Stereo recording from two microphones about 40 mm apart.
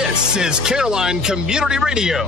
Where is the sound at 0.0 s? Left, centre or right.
Centre.